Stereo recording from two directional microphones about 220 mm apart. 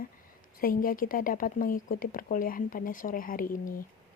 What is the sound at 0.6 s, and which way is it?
A woman's voice, 40° left (ahead or behind).